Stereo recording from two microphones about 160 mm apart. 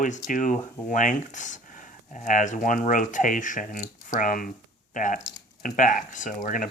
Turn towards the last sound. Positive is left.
turn(degrees=60)  # may be behind; listen again after turning